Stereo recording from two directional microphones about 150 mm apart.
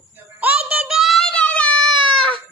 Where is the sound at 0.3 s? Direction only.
10° right (ahead or behind); by 2.4 s 5° left (ahead or behind).